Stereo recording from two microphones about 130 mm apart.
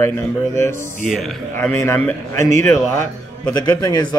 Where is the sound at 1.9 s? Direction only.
20° left (ahead or behind).